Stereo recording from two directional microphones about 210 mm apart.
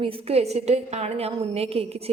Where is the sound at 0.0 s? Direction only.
30° right (ahead or behind).